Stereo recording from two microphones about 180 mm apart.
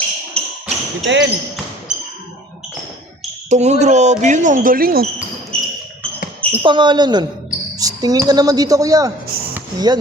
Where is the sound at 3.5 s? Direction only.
40° right (ahead or behind); by 5.0 s 55° right (ahead or behind).